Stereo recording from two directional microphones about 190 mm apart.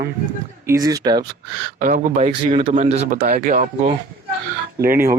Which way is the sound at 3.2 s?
50° right (ahead or behind).